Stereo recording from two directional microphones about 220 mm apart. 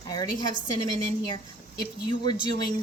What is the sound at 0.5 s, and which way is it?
Speech, 20° right (ahead or behind).